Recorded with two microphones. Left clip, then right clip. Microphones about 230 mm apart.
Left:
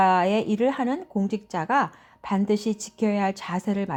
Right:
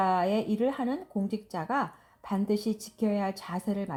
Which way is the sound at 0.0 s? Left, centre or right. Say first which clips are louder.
Left 6 dB; left.